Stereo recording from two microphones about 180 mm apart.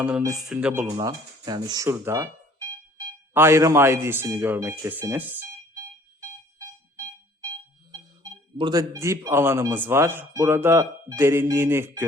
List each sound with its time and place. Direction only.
0.3 s speech: 5° right (ahead or behind)
0.9 s speech: 20° right (ahead or behind)
3.3 s speech: 15° right (ahead or behind)
8.2 s speech: 20° right (ahead or behind)